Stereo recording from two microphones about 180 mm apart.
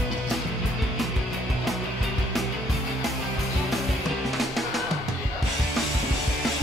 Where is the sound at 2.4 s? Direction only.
Centre (ahead or behind).